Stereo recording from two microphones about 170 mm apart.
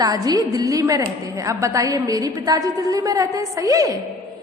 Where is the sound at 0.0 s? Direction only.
20° right (ahead or behind).